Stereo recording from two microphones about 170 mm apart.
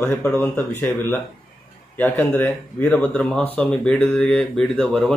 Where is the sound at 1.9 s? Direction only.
10° left (ahead or behind).